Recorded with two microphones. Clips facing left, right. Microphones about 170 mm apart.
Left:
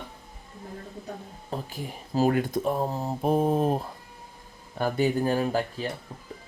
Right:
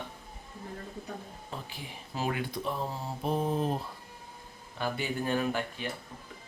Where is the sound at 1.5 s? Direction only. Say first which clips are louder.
Left 11 dB; 45° left (ahead or behind).